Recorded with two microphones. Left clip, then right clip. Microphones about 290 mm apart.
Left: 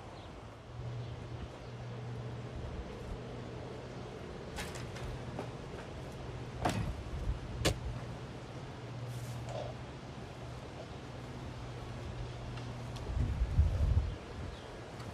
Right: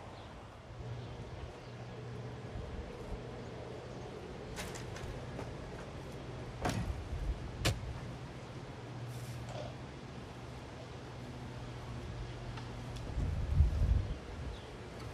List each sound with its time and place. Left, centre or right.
6.6 s vehicle: centre
7.6 s vehicle: left